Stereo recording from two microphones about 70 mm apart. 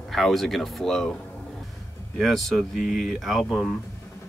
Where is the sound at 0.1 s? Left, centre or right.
Centre.